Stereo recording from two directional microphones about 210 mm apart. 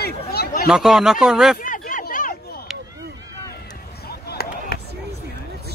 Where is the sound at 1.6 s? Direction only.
40° left (ahead or behind).